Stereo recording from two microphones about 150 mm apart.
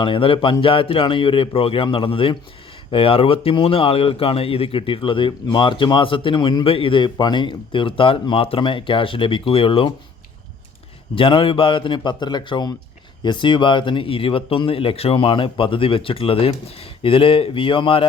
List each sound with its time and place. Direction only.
0.0 s a man's voice: 35° left (ahead or behind)
11.1 s a man's voice: 35° left (ahead or behind)